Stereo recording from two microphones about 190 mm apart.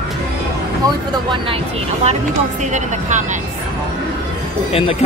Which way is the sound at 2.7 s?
40° right (ahead or behind).